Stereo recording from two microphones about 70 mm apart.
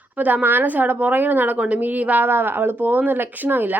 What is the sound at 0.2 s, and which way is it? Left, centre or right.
A woman's voice, right.